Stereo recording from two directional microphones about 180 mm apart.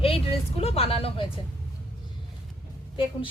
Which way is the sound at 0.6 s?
35° left (ahead or behind).